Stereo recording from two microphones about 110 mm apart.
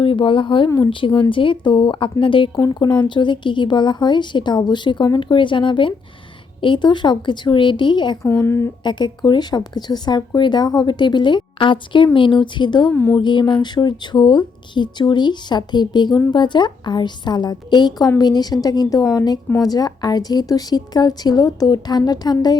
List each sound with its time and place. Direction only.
0.0 s speech: 50° left (ahead or behind)
2.6 s speech: 35° left (ahead or behind)
8.2 s speech: 20° left (ahead or behind)
8.8 s speech: 40° left (ahead or behind)
12.9 s a woman's voice: 20° left (ahead or behind)
13.1 s speech: 45° left (ahead or behind)